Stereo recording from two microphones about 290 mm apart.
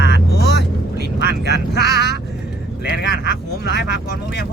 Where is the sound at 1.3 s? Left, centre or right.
Left.